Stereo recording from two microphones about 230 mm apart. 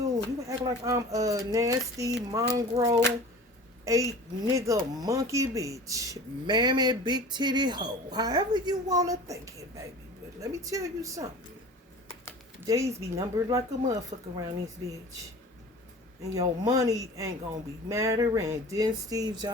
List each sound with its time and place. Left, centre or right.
0.0 s speech: centre
12.5 s a woman's voice: centre
16.3 s speech: centre